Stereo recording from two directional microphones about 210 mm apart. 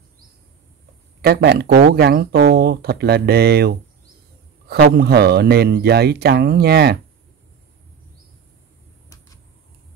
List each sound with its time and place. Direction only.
1.2 s speech: 50° right (ahead or behind)